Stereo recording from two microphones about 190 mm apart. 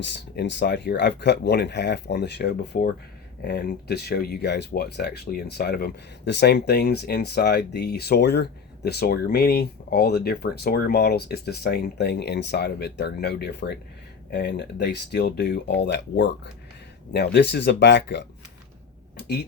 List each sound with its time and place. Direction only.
0.0 s speech: 65° left (ahead or behind)